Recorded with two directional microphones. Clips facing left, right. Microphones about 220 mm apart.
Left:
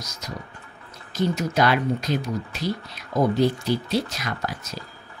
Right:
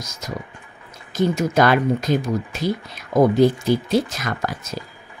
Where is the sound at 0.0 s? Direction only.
50° right (ahead or behind).